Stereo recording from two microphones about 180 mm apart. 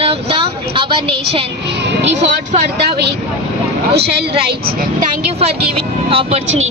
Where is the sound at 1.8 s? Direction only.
75° right (ahead or behind).